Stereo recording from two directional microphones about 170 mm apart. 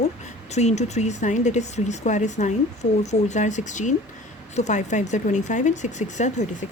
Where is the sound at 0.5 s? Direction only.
40° left (ahead or behind).